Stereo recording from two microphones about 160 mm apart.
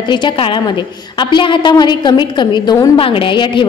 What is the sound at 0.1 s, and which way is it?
A woman's voice, 30° left (ahead or behind).